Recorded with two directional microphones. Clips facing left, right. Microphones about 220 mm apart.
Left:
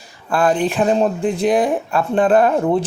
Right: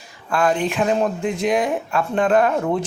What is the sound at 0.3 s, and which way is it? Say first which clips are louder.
Speech: left 3 dB; 35° left (ahead or behind).